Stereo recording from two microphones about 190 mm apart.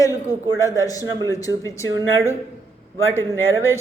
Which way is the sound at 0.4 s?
15° left (ahead or behind).